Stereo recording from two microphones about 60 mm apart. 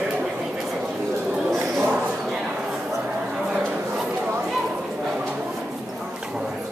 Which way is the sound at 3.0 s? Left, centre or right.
Centre.